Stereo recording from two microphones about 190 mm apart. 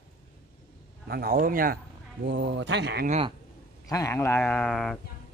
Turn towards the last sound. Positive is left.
turn(degrees=0)  # may be behind; listen again after turning